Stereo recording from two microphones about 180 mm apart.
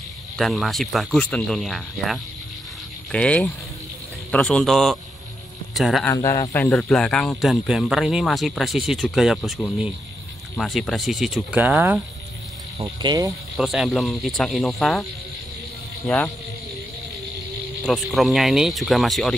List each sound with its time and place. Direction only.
0.4 s speech: centre (ahead or behind)
6.0 s speech: 20° left (ahead or behind)
6.5 s speech: 10° left (ahead or behind); by 12.0 s 10° right (ahead or behind)
12.8 s speech: 20° right (ahead or behind)
13.6 s speech: centre (ahead or behind)
17.8 s speech: centre (ahead or behind)